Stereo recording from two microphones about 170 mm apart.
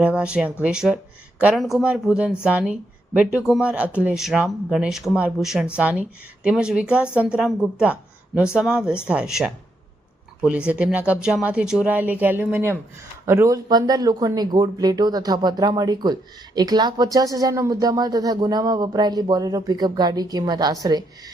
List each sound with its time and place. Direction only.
0.0 s speech: 5° right (ahead or behind)
10.7 s speech: 5° right (ahead or behind); by 21.0 s 25° right (ahead or behind)